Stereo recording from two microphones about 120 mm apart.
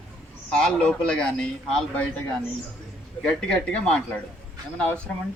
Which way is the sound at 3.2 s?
5° left (ahead or behind).